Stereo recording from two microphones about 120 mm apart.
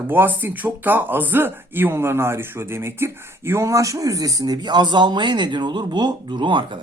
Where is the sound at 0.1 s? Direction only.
15° right (ahead or behind).